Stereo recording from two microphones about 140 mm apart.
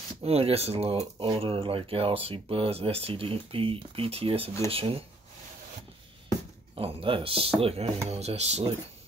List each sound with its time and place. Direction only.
0.2 s speech: 45° right (ahead or behind)
6.7 s speech: 40° right (ahead or behind)